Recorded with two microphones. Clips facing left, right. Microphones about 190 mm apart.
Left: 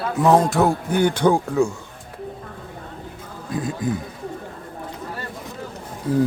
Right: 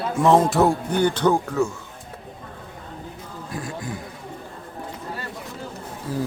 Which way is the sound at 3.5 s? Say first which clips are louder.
Left 8 dB; 20° left (ahead or behind).